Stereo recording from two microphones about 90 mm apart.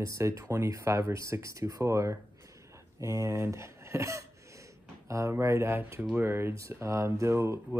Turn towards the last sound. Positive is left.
turn(degrees=-30)  # may be behind; listen again after turning